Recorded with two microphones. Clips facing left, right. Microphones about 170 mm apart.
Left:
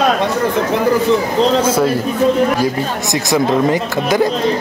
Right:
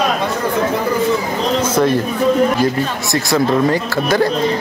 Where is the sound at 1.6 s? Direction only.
10° left (ahead or behind).